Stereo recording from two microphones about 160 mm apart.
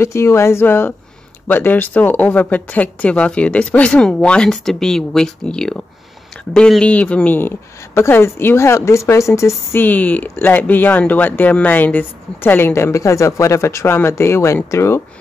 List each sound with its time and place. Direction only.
0.0 s speech: 15° left (ahead or behind)